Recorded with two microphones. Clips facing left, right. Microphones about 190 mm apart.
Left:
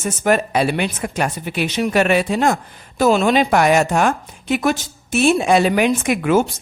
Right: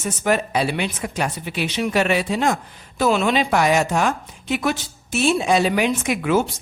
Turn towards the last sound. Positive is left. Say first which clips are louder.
# left 3 dB
turn(degrees=55)  # may be behind; listen again after turning